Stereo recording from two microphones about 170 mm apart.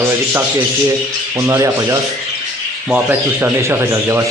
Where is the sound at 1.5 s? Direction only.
20° right (ahead or behind).